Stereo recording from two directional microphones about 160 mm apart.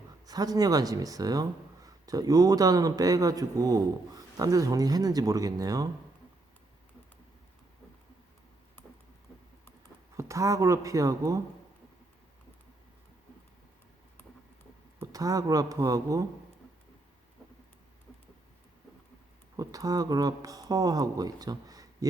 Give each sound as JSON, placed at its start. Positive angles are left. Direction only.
{"t": 0.3, "sound": "speech", "side_deg": -25}
{"t": 10.2, "sound": "speech", "side_deg": -20}
{"t": 15.0, "sound": "speech", "side_deg": -20}
{"t": 19.5, "sound": "speech", "side_deg": -20}